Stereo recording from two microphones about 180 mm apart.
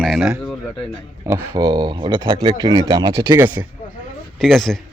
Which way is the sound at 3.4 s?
10° right (ahead or behind).